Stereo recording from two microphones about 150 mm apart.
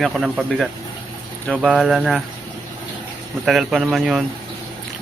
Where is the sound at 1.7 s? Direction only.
5° right (ahead or behind).